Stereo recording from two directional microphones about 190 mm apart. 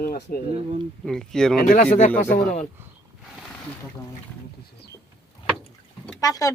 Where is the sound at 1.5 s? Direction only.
45° left (ahead or behind).